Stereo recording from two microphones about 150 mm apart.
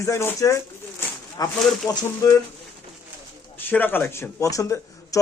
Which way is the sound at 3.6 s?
10° left (ahead or behind).